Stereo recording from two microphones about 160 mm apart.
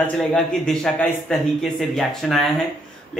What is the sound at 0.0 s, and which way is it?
Speech, 5° left (ahead or behind).